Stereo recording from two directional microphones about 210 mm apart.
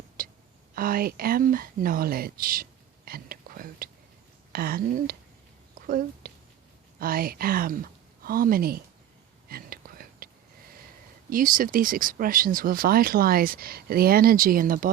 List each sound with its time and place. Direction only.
0.2 s whispering: 40° right (ahead or behind)
0.7 s speech: 45° right (ahead or behind)
9.5 s whispering: 45° right (ahead or behind)
11.3 s speech: 40° right (ahead or behind)